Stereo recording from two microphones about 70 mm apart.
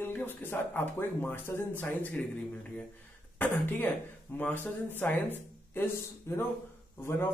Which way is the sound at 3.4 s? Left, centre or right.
Left.